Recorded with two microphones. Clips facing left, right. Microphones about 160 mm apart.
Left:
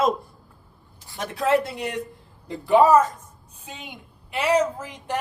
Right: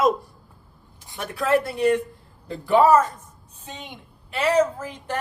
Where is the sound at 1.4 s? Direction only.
20° left (ahead or behind).